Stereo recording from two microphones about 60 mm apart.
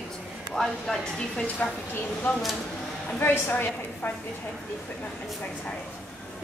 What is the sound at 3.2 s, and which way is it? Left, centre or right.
Speech, left.